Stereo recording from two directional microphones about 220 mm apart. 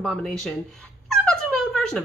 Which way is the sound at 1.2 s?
5° left (ahead or behind).